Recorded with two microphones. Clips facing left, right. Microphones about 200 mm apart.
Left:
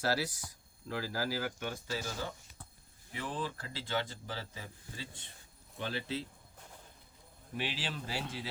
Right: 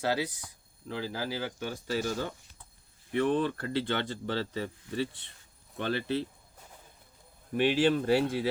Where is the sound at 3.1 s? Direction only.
65° right (ahead or behind).